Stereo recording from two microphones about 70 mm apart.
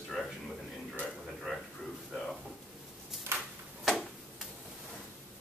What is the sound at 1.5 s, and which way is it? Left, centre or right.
Speech, centre.